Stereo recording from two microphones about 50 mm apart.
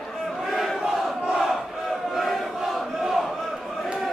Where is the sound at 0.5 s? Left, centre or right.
Centre.